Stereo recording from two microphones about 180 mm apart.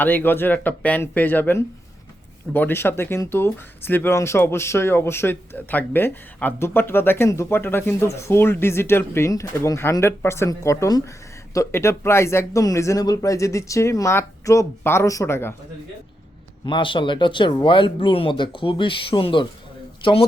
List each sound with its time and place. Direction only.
0.0 s speech: 10° left (ahead or behind)
16.6 s speech: 25° left (ahead or behind)